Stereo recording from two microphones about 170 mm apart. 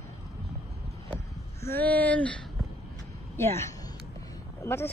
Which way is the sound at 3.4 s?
15° left (ahead or behind).